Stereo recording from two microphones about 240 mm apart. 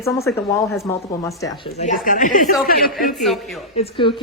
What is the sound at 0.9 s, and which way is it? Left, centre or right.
Speech, centre.